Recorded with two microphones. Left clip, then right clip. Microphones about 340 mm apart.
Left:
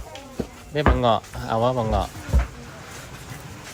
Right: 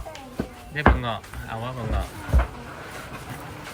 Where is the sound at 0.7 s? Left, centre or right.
Centre.